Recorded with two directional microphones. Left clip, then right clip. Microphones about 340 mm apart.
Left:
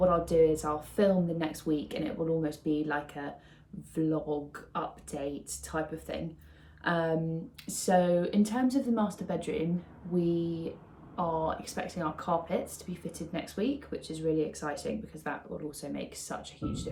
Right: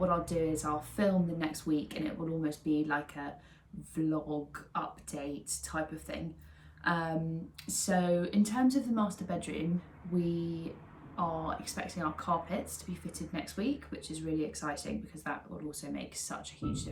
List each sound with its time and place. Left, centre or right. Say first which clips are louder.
0.0 s speech: left 7 dB; centre